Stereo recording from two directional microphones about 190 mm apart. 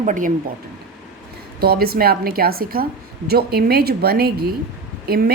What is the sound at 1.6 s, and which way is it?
A woman's voice, 55° right (ahead or behind).